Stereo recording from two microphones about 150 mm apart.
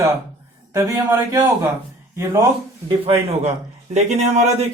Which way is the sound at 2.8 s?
40° right (ahead or behind).